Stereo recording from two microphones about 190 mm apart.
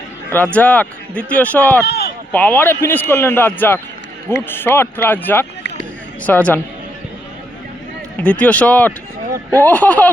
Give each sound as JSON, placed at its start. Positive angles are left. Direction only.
{"t": 0.3, "sound": "speech", "side_deg": 10}
{"t": 1.9, "sound": "a sound", "side_deg": 55}
{"t": 2.3, "sound": "speech", "side_deg": 10}
{"t": 8.2, "sound": "speech", "side_deg": 5}